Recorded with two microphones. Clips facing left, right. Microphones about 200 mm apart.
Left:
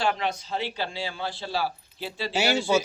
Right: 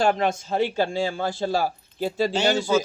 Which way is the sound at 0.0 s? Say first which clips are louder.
Right 6 dB; 45° right (ahead or behind).